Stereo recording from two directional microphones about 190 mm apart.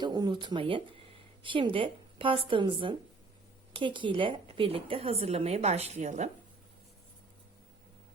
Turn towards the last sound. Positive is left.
turn(degrees=-40)  # may be behind; listen again after turning